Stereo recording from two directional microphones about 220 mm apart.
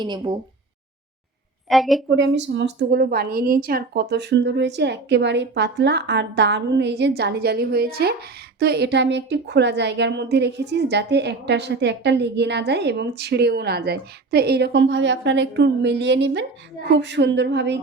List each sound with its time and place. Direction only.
0.0 s speech: 20° right (ahead or behind)
1.7 s a woman's voice: centre (ahead or behind)
2.0 s a woman's voice: 55° right (ahead or behind)